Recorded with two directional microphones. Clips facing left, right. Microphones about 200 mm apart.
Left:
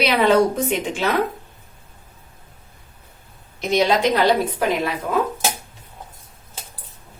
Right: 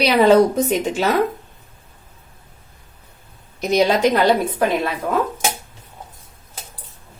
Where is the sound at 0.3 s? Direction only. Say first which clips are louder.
Right 3 dB; 40° right (ahead or behind).